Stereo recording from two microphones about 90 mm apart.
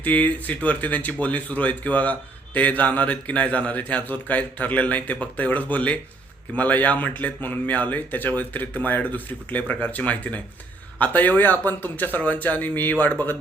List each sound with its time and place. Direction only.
0.0 s speech: 20° left (ahead or behind)